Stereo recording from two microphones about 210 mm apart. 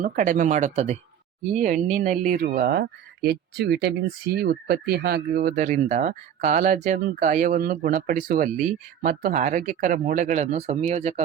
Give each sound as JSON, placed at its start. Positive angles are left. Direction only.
{"t": 0.0, "sound": "speech", "side_deg": -40}